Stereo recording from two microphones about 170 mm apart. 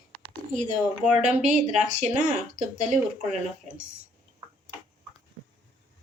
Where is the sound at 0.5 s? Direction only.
45° right (ahead or behind).